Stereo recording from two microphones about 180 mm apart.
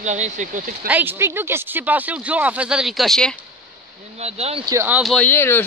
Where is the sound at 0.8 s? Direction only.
10° right (ahead or behind).